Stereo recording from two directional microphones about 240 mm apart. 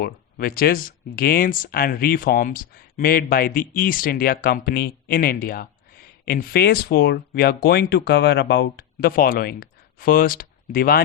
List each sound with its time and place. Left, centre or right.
0.0 s speech: left